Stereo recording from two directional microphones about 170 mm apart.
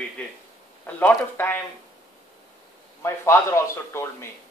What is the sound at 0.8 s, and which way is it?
Speech, 10° left (ahead or behind).